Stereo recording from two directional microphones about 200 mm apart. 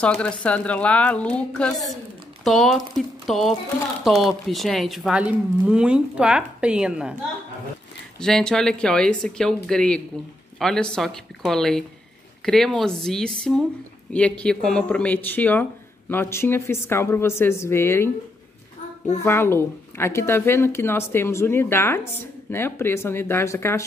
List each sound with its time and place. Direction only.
0.0 s speech: 5° left (ahead or behind)
8.2 s a woman's voice: 5° left (ahead or behind)
19.2 s a woman's voice: 10° left (ahead or behind)